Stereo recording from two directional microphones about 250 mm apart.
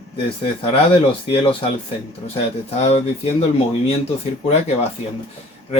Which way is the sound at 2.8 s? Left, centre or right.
Left.